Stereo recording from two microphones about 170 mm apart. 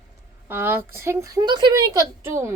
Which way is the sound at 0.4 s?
10° right (ahead or behind).